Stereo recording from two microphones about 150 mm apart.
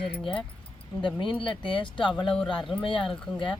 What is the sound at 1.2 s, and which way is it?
Speech, 35° left (ahead or behind).